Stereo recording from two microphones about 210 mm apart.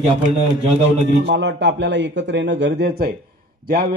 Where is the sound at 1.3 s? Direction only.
55° right (ahead or behind).